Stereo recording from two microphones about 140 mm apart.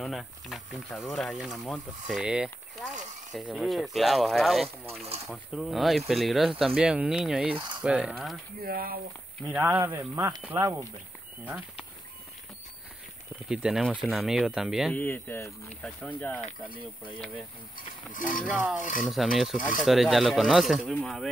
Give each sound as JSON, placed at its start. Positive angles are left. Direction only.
{"t": 0.0, "sound": "speech", "side_deg": 0}
{"t": 8.6, "sound": "speech", "side_deg": -90}
{"t": 9.5, "sound": "speech", "side_deg": -15}
{"t": 13.5, "sound": "speech", "side_deg": -5}
{"t": 15.0, "sound": "speech", "side_deg": 15}
{"t": 17.7, "sound": "speech", "side_deg": 75}
{"t": 18.6, "sound": "speech", "side_deg": -10}